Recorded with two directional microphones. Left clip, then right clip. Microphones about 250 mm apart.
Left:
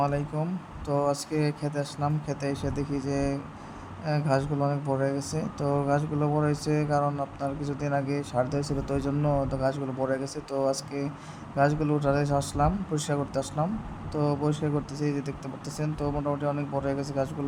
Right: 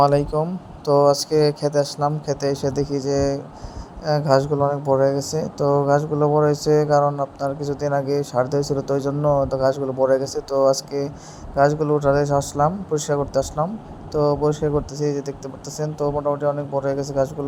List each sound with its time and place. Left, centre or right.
0.0 s speech: right